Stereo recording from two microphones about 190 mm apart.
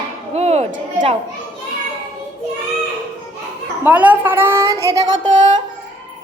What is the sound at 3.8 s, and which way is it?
A woman's voice, 10° right (ahead or behind).